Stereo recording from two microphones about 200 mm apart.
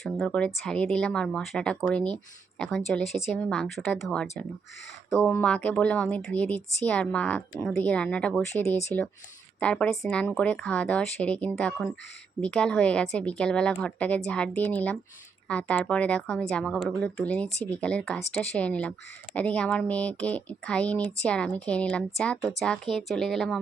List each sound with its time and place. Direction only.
0.0 s speech: 5° left (ahead or behind)